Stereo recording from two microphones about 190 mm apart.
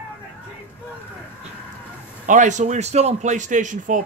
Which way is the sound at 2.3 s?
40° right (ahead or behind).